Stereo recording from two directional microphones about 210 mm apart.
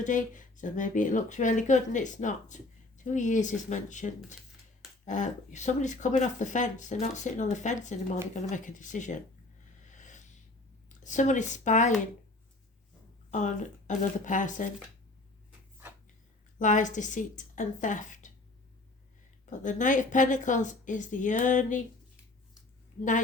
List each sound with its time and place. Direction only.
0.0 s speech: 35° left (ahead or behind)
9.9 s a sound: 35° left (ahead or behind)
10.8 s speech: 35° left (ahead or behind)
13.3 s speech: 35° left (ahead or behind)
16.6 s speech: 35° left (ahead or behind)
19.5 s speech: 35° left (ahead or behind)